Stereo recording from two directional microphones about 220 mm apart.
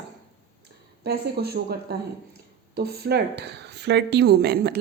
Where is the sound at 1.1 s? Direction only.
45° right (ahead or behind).